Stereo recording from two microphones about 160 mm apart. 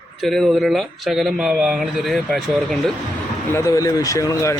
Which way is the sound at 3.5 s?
20° left (ahead or behind).